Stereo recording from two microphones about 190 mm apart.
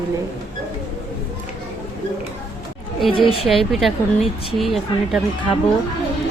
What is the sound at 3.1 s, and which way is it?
Speech, 30° left (ahead or behind).